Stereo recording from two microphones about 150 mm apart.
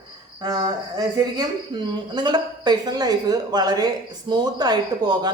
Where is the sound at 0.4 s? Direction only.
25° right (ahead or behind).